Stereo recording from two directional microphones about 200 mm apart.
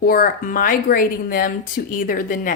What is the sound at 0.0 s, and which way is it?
Speech, 45° left (ahead or behind).